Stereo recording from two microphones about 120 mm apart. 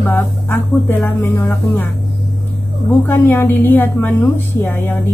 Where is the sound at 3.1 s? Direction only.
20° left (ahead or behind).